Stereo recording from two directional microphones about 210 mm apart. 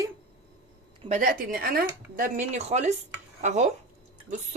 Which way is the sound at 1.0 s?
35° right (ahead or behind).